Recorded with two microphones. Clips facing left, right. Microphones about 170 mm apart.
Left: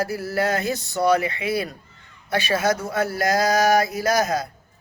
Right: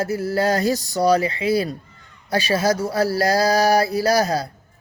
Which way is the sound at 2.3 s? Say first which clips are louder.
Right 2 dB; 30° right (ahead or behind).